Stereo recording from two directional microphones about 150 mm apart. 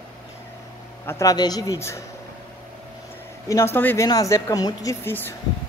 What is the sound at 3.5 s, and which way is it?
Speech, 15° left (ahead or behind).